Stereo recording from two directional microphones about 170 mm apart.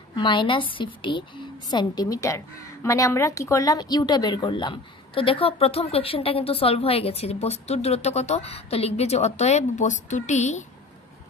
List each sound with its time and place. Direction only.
0.1 s a woman's voice: 30° left (ahead or behind)